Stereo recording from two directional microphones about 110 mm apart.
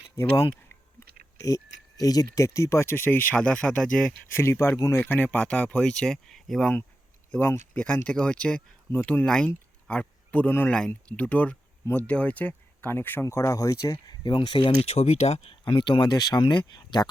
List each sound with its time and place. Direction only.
0.9 s speech: 30° left (ahead or behind); by 4.1 s 10° left (ahead or behind)
4.3 s speech: 25° left (ahead or behind)
5.0 s speech: 15° left (ahead or behind)
7.3 s speech: 20° left (ahead or behind)
13.9 s speech: 45° left (ahead or behind)
14.8 s speech: 70° left (ahead or behind)
15.6 s speech: 45° left (ahead or behind)